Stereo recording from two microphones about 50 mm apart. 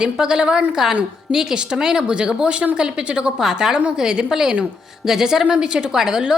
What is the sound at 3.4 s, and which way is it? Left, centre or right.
A woman's voice, centre.